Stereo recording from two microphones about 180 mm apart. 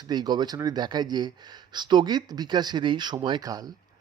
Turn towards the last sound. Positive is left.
turn(degrees=-20)  # may be behind; listen again after turning